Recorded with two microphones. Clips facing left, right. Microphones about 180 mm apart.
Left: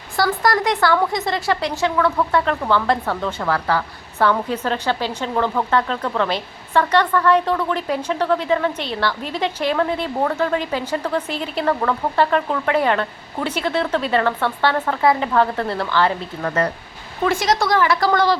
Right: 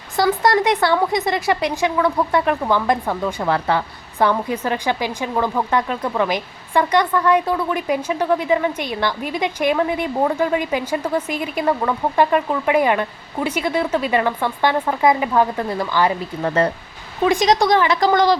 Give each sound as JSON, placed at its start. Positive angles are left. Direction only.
{"t": 0.2, "sound": "a woman's voice", "side_deg": -20}